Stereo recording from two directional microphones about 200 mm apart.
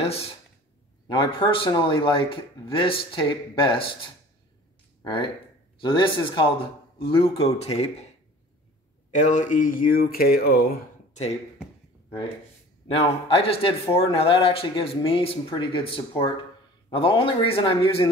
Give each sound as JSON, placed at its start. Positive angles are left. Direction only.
{"t": 1.0, "sound": "speech", "side_deg": 25}
{"t": 5.8, "sound": "speech", "side_deg": 25}
{"t": 9.1, "sound": "speech", "side_deg": 40}
{"t": 12.8, "sound": "speech", "side_deg": 30}